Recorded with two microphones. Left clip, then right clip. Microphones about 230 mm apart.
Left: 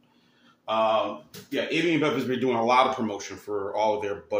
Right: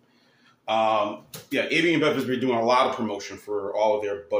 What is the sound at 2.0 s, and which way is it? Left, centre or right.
Speech, centre.